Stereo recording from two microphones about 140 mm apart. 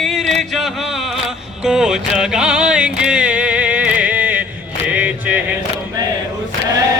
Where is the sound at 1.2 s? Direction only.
5° right (ahead or behind).